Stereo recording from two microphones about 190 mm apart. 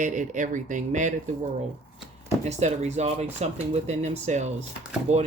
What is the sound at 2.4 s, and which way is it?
Speech, 35° right (ahead or behind).